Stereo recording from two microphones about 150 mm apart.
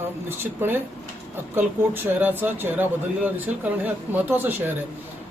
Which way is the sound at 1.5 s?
10° right (ahead or behind).